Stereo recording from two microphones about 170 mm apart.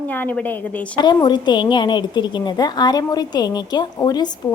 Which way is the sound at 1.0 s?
25° left (ahead or behind).